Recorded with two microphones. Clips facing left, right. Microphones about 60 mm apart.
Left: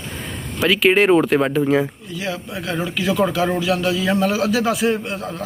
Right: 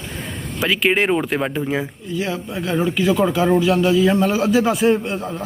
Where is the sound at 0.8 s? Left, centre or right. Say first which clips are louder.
Left 5 dB; centre.